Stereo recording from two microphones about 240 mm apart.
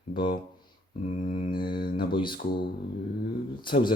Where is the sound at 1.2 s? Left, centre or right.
Left.